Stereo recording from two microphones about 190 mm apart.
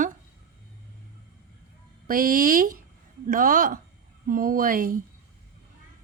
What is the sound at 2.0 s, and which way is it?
Speech, 50° right (ahead or behind).